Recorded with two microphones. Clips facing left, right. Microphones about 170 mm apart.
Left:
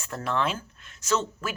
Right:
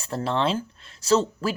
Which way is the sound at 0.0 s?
30° right (ahead or behind).